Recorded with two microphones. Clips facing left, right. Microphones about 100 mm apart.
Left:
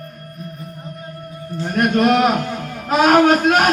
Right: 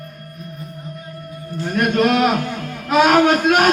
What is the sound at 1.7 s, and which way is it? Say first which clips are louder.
A man's voice: left 1 dB; 40° left (ahead or behind).